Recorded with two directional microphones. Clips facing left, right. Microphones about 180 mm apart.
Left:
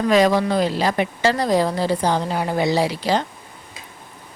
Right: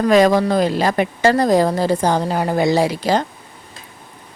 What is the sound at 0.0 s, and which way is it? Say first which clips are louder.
Speech: right 3 dB; 45° right (ahead or behind).